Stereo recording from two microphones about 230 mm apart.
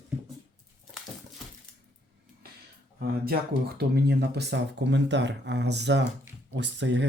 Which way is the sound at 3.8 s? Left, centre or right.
Right.